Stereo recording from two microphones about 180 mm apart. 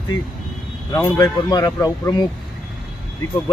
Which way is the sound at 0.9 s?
15° left (ahead or behind).